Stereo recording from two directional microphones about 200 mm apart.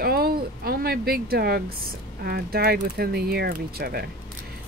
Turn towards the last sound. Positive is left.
turn(degrees=-50)  # may be behind; listen again after turning